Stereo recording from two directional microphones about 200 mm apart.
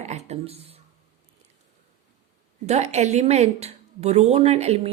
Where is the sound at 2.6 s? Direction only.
35° right (ahead or behind).